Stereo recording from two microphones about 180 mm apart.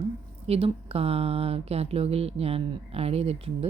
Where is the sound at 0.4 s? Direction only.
35° right (ahead or behind).